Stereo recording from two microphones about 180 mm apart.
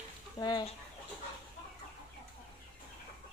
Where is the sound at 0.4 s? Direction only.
25° left (ahead or behind).